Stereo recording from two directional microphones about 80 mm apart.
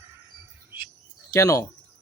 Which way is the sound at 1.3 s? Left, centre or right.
Left.